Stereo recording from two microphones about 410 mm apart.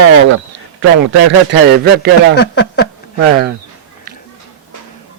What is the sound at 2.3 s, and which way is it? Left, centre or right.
Speech, left.